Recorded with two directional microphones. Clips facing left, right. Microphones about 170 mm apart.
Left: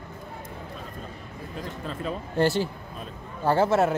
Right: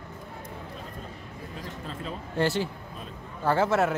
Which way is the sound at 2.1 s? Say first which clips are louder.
Left 3 dB; 40° left (ahead or behind).